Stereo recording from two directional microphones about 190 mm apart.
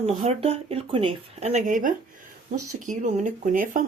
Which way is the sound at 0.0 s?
35° right (ahead or behind).